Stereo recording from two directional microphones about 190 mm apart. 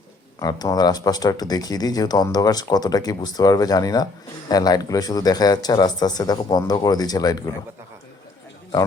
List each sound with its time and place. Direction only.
0.3 s speech: 20° left (ahead or behind)